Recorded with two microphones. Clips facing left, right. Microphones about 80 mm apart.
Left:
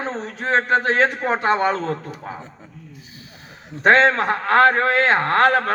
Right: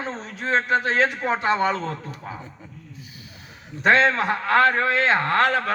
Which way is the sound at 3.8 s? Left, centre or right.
Left.